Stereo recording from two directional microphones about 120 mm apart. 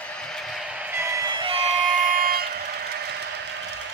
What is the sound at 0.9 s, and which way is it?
Music, 25° right (ahead or behind).